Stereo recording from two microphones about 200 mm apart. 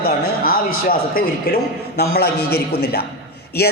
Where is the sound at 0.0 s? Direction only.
45° left (ahead or behind).